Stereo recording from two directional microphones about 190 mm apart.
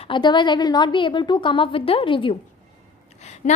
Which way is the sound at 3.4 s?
40° left (ahead or behind).